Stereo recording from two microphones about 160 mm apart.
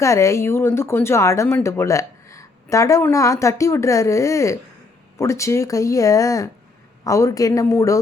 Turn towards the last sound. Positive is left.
turn(degrees=20)  # may be behind; listen again after turning